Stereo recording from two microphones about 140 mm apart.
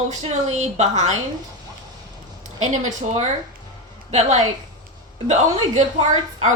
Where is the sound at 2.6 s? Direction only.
55° right (ahead or behind).